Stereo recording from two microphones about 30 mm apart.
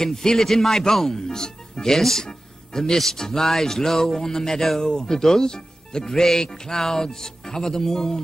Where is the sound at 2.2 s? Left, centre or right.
Left.